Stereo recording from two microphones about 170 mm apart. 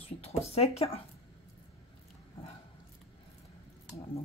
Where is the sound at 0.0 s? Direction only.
35° left (ahead or behind).